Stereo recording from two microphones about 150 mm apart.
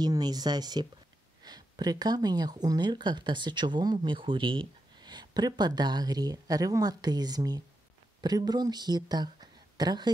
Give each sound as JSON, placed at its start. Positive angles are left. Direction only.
{"t": 0.0, "sound": "speech", "side_deg": -25}